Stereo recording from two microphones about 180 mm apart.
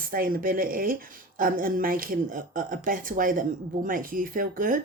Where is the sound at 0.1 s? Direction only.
55° right (ahead or behind).